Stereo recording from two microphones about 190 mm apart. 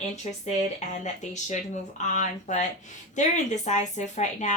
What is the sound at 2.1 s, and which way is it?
A woman's voice, 40° left (ahead or behind).